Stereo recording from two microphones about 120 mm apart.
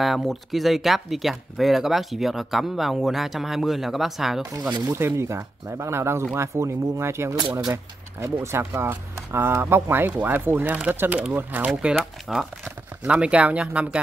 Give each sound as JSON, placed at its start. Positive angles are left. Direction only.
{"t": 0.0, "sound": "speech", "side_deg": 0}
{"t": 4.7, "sound": "speech", "side_deg": -25}